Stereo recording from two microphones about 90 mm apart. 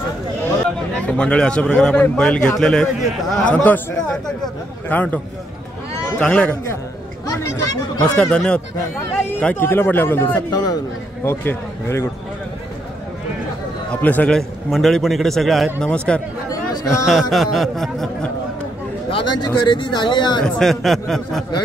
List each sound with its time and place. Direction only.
0.7 s a man's voice: 10° left (ahead or behind)
3.4 s a man's voice: 15° left (ahead or behind)
8.0 s a man's voice: 10° left (ahead or behind)
10.5 s a man's voice: 45° left (ahead or behind)
11.2 s speech: 25° left (ahead or behind)
14.0 s a man's voice: 15° left (ahead or behind)
14.7 s speech: 5° left (ahead or behind)
16.4 s chatter: 40° left (ahead or behind)
17.0 s speech: centre (ahead or behind)
19.4 s speech: 60° left (ahead or behind)
20.4 s speech: 5° left (ahead or behind)